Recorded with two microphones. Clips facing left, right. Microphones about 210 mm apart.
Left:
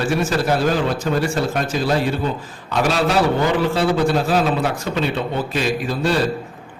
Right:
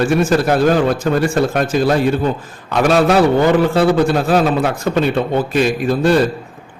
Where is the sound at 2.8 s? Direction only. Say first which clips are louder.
Right 7 dB; 50° right (ahead or behind).